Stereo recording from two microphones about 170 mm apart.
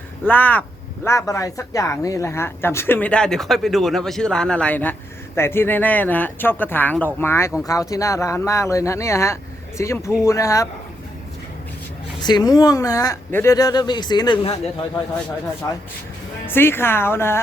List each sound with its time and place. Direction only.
0.3 s a man's voice: 10° left (ahead or behind)
12.2 s a man's voice: 25° left (ahead or behind)
15.6 s a man's voice: 20° left (ahead or behind)